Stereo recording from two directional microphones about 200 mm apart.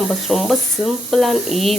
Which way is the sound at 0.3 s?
Centre (ahead or behind).